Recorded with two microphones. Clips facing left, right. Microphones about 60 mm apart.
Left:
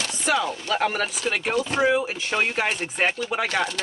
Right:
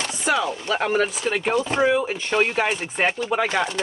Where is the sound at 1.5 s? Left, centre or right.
Right.